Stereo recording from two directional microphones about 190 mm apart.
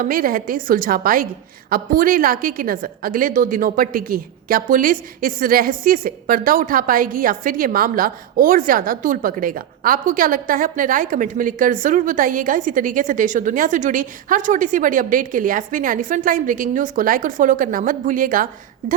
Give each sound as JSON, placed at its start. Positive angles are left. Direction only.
{"t": 0.0, "sound": "a woman's voice", "side_deg": -45}